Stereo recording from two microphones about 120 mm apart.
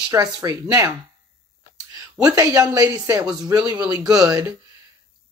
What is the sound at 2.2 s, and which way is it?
Speech, 30° right (ahead or behind).